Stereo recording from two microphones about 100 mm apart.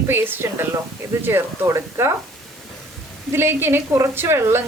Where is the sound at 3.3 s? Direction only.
25° right (ahead or behind).